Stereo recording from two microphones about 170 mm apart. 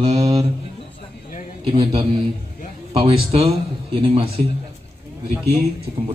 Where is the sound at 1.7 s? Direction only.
30° right (ahead or behind).